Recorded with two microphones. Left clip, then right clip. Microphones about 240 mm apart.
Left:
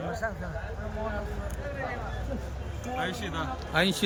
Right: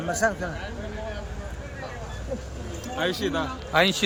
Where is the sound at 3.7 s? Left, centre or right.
Centre.